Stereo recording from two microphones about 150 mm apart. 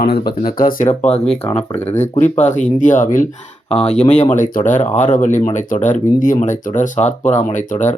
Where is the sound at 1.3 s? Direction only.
10° left (ahead or behind).